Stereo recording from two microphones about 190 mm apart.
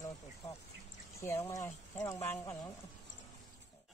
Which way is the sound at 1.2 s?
15° left (ahead or behind).